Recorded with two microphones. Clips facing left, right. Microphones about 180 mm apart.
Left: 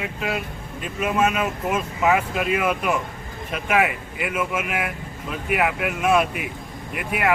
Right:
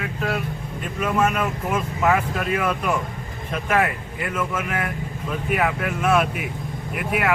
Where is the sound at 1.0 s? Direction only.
10° left (ahead or behind).